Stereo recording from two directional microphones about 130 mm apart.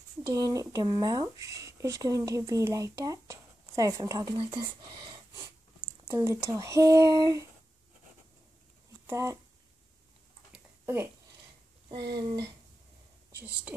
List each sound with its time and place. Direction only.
0.3 s speech: 30° right (ahead or behind)
5.8 s speech: 20° right (ahead or behind)
9.0 s speech: 25° right (ahead or behind)
11.9 s speech: 35° right (ahead or behind)